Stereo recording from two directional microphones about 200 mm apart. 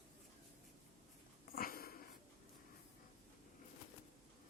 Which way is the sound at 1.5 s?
45° left (ahead or behind).